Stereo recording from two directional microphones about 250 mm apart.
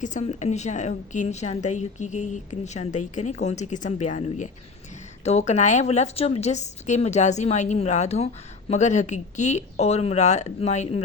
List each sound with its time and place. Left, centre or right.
0.0 s a woman's voice: left